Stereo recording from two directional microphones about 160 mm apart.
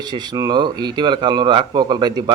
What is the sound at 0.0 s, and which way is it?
A man's voice, 25° right (ahead or behind).